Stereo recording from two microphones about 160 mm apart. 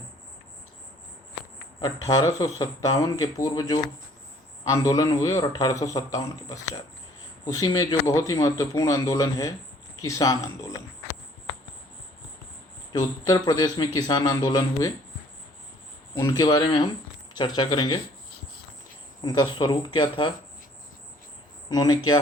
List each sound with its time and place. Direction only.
1.8 s a man's voice: 25° left (ahead or behind)
12.9 s a man's voice: 25° left (ahead or behind)
16.4 s a man's voice: 30° left (ahead or behind)
19.2 s a man's voice: 25° left (ahead or behind)
21.7 s a man's voice: 25° left (ahead or behind)